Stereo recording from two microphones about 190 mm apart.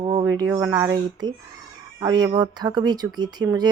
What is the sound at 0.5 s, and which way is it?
Speech, 10° right (ahead or behind).